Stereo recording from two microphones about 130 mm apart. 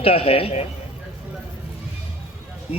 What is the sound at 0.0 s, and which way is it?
Speech, 50° left (ahead or behind).